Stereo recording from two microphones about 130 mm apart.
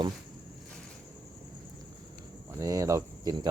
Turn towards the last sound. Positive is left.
turn(degrees=-30)  # may be behind; listen again after turning